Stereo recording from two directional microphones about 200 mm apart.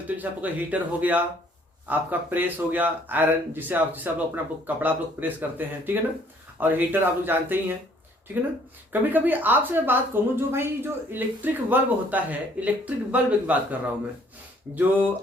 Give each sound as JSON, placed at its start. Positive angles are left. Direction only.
{"t": 0.2, "sound": "speech", "side_deg": -10}
{"t": 8.9, "sound": "speech", "side_deg": -10}
{"t": 14.8, "sound": "speech", "side_deg": -10}